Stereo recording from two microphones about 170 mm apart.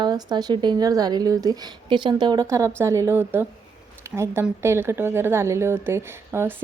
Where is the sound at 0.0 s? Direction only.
25° right (ahead or behind).